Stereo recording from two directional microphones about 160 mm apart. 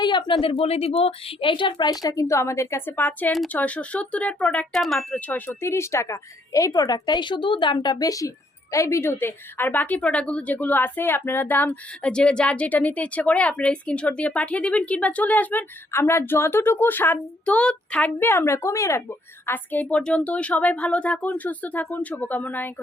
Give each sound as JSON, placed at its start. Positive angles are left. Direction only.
{"t": 0.0, "sound": "a woman's voice", "side_deg": 30}